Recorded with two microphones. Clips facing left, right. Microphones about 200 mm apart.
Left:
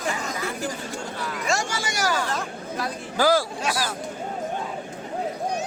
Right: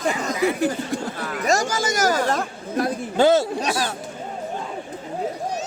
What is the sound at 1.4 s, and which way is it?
Speech, 40° right (ahead or behind).